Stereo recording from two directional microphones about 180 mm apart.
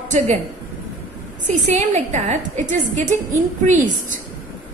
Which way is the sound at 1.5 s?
40° right (ahead or behind).